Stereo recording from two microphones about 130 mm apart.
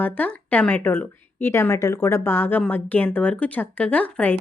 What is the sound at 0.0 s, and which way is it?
A woman's voice, 10° left (ahead or behind).